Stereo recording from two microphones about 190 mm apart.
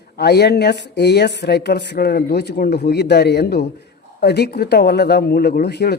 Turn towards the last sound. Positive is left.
turn(degrees=60)  # may be behind; listen again after turning